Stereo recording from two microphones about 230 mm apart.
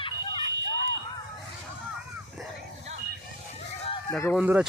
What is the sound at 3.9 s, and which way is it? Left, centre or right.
Chicken, centre.